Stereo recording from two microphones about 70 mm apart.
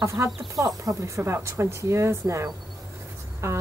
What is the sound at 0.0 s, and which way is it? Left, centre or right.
Speech, right.